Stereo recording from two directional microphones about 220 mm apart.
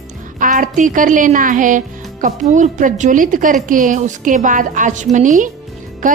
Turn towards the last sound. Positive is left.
turn(degrees=-35)  # may be behind; listen again after turning